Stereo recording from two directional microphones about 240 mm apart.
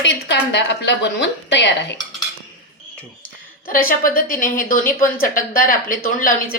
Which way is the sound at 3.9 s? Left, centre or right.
Left.